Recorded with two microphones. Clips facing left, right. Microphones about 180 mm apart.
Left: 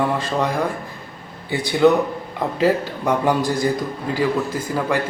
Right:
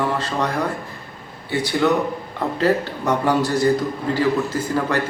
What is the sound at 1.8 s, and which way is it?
A man's voice, 20° left (ahead or behind).